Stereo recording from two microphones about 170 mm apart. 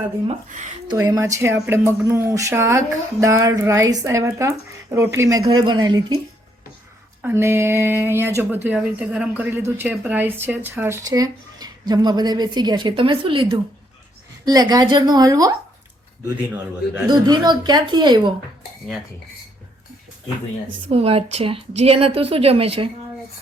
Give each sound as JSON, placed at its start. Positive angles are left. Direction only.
{"t": 0.9, "sound": "speech", "side_deg": -20}
{"t": 7.2, "sound": "a woman's voice", "side_deg": -10}
{"t": 17.1, "sound": "a woman's voice", "side_deg": -25}
{"t": 20.9, "sound": "a woman's voice", "side_deg": -35}